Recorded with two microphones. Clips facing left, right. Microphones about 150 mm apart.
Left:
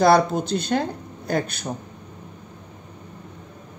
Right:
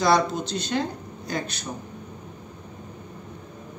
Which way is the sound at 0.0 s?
55° left (ahead or behind).